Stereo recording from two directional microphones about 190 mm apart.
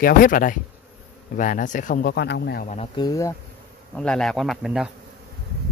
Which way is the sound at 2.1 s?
60° left (ahead or behind).